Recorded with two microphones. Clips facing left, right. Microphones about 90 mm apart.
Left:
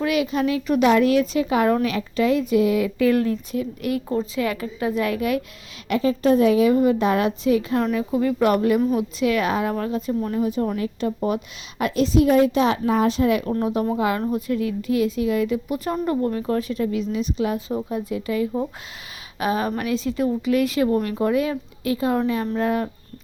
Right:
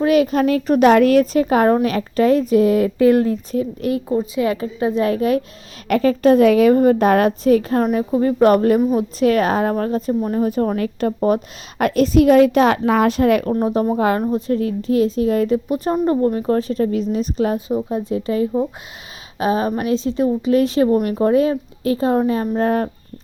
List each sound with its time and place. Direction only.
0.0 s a woman's voice: 40° right (ahead or behind)
5.9 s a woman's voice: 55° right (ahead or behind)
13.5 s speech: 30° right (ahead or behind)
14.2 s a woman's voice: 20° right (ahead or behind)
14.4 s speech: 40° right (ahead or behind)
17.7 s a woman's voice: 20° right (ahead or behind)
17.9 s a woman's voice: 35° right (ahead or behind)